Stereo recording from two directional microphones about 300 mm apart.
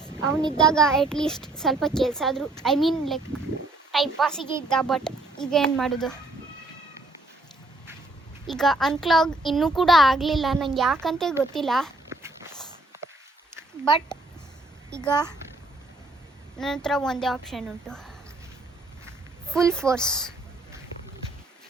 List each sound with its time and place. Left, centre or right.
0.5 s a child's voice: centre
8.4 s a child's voice: centre
12.0 s walk: centre
13.8 s speech: centre
16.6 s a child's voice: centre
19.5 s a child's voice: centre